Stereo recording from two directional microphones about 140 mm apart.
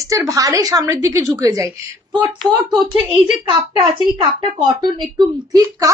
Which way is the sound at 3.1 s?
40° right (ahead or behind).